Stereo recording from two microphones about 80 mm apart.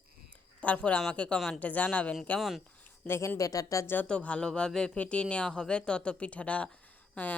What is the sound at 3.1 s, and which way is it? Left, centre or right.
Speech, left.